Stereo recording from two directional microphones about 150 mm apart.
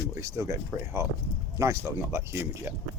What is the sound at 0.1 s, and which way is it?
Speech, 20° right (ahead or behind).